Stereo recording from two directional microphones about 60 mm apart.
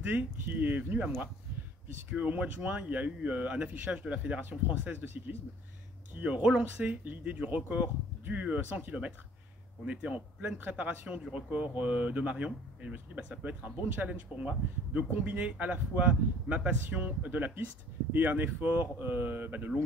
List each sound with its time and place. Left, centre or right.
0.0 s speech: right
2.0 s speech: right